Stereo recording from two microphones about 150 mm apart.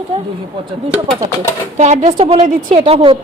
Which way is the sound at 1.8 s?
50° right (ahead or behind).